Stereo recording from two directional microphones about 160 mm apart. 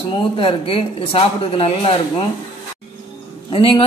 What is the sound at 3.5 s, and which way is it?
Speech, 35° left (ahead or behind).